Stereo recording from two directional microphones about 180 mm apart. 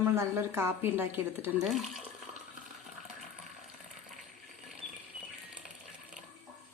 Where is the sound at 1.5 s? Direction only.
Centre (ahead or behind).